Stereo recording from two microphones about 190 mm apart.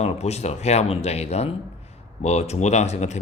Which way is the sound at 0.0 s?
35° left (ahead or behind).